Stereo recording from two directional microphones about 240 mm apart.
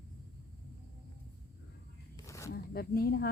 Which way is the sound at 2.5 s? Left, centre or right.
Left.